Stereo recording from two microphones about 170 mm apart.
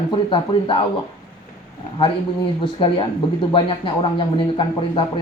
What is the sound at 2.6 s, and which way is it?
Speech, 30° left (ahead or behind).